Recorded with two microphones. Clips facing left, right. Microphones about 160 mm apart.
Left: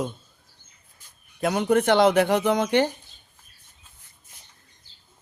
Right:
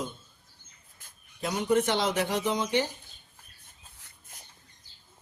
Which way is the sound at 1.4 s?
60° left (ahead or behind).